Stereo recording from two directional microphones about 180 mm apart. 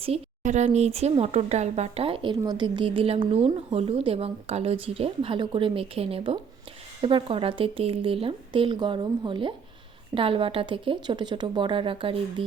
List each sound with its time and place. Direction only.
0.0 s speech: 35° right (ahead or behind)